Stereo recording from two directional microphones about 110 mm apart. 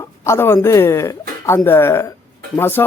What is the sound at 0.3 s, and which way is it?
Speech, 20° left (ahead or behind).